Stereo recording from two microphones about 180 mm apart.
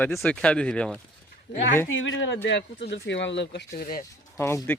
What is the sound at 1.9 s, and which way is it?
Speech, 90° left.